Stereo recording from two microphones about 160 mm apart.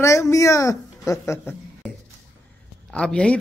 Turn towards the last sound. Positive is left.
turn(degrees=5)  # may be behind; listen again after turning